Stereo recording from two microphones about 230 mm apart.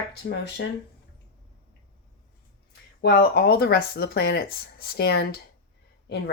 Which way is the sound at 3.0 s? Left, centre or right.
Left.